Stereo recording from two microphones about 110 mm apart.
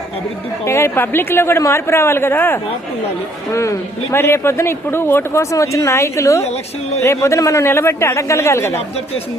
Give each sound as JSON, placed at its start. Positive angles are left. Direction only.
{"t": 0.6, "sound": "speech", "side_deg": 25}